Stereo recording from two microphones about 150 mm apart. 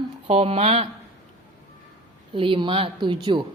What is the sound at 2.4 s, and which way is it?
A woman's voice, 35° right (ahead or behind).